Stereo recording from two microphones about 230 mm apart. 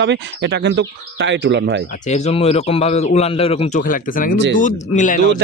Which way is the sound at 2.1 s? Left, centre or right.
Left.